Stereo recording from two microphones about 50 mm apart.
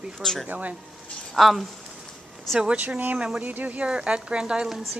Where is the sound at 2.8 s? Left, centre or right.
Right.